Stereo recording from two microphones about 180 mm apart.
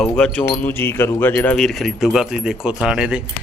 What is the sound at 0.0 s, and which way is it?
Speech, 5° left (ahead or behind).